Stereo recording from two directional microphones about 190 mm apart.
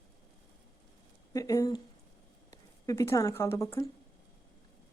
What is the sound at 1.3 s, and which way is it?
Speech, 20° left (ahead or behind).